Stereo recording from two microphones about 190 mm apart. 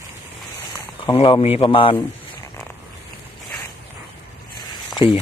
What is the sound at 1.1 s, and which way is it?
Speech, 30° left (ahead or behind).